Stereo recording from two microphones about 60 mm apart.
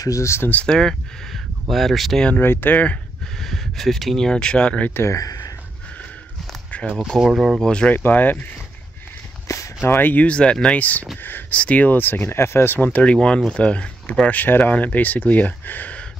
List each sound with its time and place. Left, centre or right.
0.0 s speech: left
0.5 s speech: left
0.7 s speech: centre
2.4 s speech: left
3.3 s speech: centre
4.3 s speech: centre
5.1 s speech: left
6.7 s a sound: left
7.2 s speech: centre
7.6 s speech: centre
7.9 s speech: left
9.5 s a sound: left
9.8 s speech: left
13.0 s speech: centre